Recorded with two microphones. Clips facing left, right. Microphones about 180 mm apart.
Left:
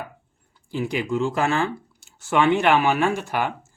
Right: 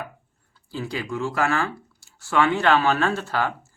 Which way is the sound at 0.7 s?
20° left (ahead or behind).